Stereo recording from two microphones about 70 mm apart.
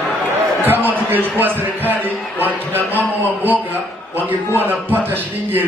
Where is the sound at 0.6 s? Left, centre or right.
Right.